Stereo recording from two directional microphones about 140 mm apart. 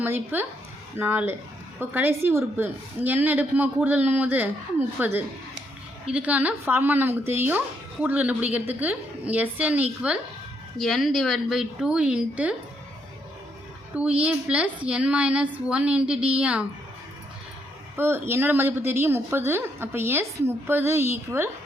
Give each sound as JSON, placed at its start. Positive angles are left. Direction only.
{"t": 0.0, "sound": "a woman's voice", "side_deg": -15}
{"t": 13.9, "sound": "a woman's voice", "side_deg": -10}
{"t": 17.9, "sound": "a woman's voice", "side_deg": -15}